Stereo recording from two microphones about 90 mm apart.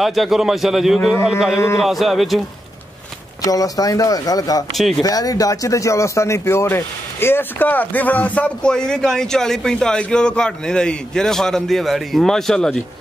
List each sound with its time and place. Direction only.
0.0 s a man's voice: centre (ahead or behind)
3.4 s speech: 40° left (ahead or behind)
4.7 s a man's voice: centre (ahead or behind)
5.0 s speech: 45° left (ahead or behind); by 12.8 s 5° left (ahead or behind)